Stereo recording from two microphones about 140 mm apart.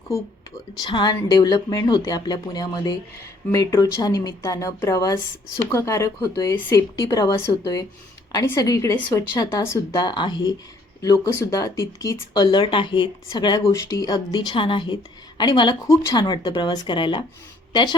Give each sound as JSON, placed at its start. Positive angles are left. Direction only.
{"t": 0.9, "sound": "a woman's voice", "side_deg": 35}